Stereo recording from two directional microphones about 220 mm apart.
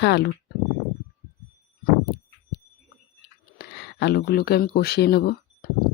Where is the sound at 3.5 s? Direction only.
45° left (ahead or behind).